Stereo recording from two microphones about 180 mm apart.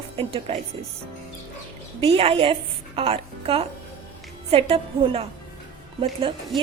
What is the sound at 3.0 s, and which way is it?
Music, 30° right (ahead or behind).